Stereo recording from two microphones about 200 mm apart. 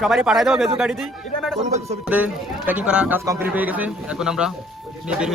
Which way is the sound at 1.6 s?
35° right (ahead or behind).